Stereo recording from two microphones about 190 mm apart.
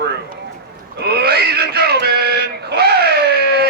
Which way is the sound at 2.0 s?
60° right (ahead or behind).